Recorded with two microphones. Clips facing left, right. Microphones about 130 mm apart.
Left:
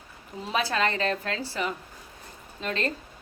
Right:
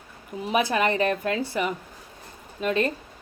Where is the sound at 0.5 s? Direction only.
15° right (ahead or behind).